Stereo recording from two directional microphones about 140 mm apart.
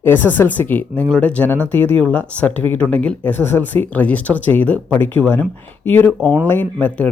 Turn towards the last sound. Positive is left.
turn(degrees=10)  # may be behind; listen again after turning